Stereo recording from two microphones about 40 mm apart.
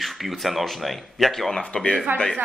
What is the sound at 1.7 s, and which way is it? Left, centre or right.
Speech, centre.